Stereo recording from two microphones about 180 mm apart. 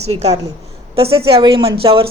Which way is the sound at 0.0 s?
35° right (ahead or behind).